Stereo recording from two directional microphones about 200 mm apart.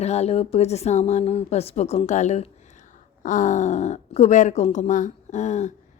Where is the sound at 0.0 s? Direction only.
30° left (ahead or behind).